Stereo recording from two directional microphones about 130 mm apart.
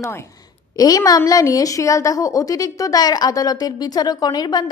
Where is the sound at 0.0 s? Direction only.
20° left (ahead or behind).